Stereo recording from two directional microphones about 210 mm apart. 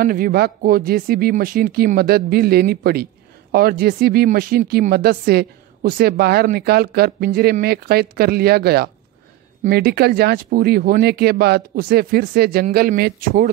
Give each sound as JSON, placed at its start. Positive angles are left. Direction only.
{"t": 0.0, "sound": "speech", "side_deg": -45}